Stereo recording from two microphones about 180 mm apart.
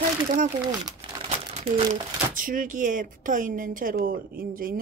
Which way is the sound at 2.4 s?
50° right (ahead or behind).